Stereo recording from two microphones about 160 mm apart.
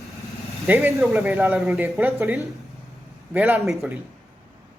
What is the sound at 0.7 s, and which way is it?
Speech, 15° right (ahead or behind).